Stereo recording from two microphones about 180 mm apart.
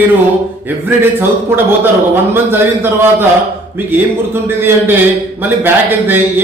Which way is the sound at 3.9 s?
10° right (ahead or behind).